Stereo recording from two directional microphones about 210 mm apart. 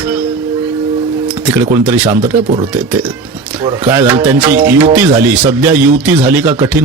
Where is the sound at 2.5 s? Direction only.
25° right (ahead or behind).